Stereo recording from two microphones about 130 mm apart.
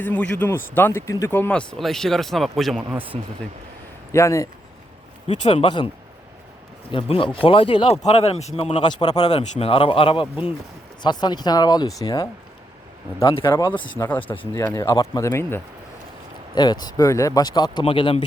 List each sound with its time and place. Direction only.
0.0 s speech: 10° left (ahead or behind)
2.9 s speech: 15° right (ahead or behind)
4.1 s speech: 20° left (ahead or behind)
5.5 s speech: 40° left (ahead or behind)
6.9 s speech: 40° left (ahead or behind)
8.0 s speech: 55° left (ahead or behind); by 9.3 s 35° left (ahead or behind)
9.3 s speech: 45° left (ahead or behind)
14.5 s speech: 20° left (ahead or behind)
16.6 s speech: 35° left (ahead or behind)
17.8 s speech: 45° left (ahead or behind)